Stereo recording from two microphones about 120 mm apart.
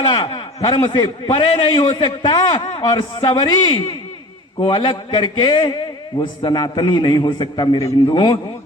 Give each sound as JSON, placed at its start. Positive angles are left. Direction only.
{"t": 0.0, "sound": "a man's voice", "side_deg": 50}